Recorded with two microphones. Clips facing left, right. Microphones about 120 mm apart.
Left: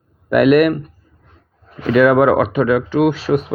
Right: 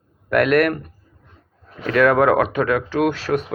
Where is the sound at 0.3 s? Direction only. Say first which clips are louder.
Left 5 dB; 10° left (ahead or behind).